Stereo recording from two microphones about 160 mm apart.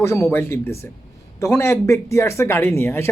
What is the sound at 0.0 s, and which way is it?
Speech, 20° left (ahead or behind).